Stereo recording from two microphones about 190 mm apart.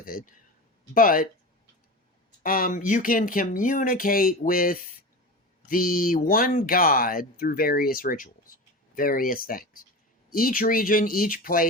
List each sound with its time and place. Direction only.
0.0 s speech: 50° left (ahead or behind)
2.4 s speech: 50° left (ahead or behind)